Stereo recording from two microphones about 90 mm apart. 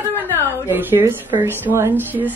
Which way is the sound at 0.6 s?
25° right (ahead or behind).